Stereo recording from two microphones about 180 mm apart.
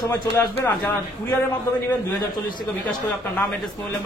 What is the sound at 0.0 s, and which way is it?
A man's voice, 15° left (ahead or behind).